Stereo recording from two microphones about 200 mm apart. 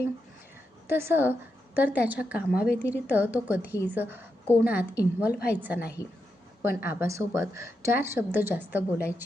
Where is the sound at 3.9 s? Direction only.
10° right (ahead or behind).